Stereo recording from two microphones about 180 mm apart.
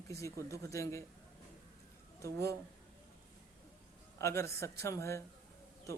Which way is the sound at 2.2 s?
15° left (ahead or behind).